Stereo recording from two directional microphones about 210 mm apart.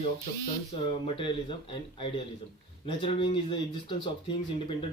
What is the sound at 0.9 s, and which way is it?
Speech, 25° left (ahead or behind).